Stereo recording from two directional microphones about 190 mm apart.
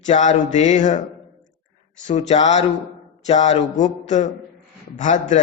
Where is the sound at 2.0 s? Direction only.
35° left (ahead or behind).